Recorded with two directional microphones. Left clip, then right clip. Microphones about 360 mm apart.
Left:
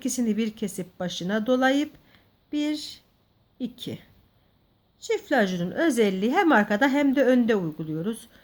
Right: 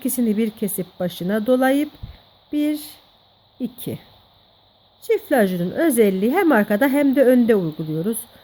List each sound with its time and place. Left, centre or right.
0.0 s a woman's voice: right